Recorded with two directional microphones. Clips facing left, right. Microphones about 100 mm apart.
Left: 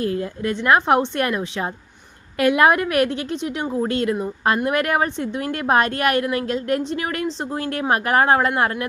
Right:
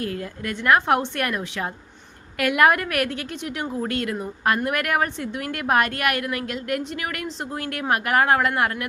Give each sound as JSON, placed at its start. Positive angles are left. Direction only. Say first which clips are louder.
{"t": 0.0, "sound": "a woman's voice", "louder": "left 6 dB", "side_deg": 25}